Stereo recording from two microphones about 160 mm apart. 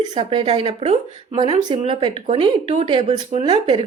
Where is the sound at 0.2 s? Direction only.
35° right (ahead or behind).